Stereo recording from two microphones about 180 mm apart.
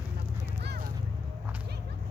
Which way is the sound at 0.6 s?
65° right (ahead or behind).